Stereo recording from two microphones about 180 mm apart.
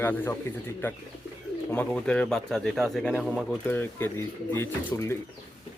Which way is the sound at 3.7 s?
10° left (ahead or behind).